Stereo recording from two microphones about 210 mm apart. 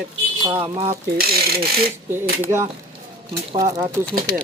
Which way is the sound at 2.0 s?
10° right (ahead or behind).